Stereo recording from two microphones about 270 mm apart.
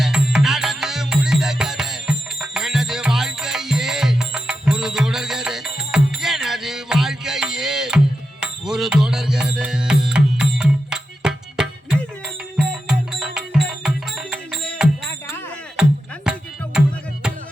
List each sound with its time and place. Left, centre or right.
0.0 s music: centre
16.3 s music: centre